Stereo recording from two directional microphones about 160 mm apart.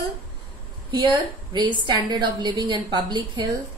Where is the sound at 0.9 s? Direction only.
30° right (ahead or behind).